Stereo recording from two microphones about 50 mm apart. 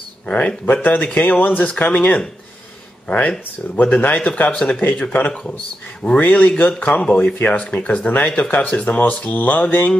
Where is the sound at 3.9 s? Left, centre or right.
Left.